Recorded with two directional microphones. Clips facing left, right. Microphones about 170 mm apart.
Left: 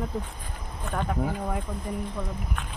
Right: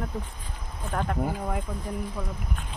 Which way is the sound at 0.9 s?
Centre (ahead or behind).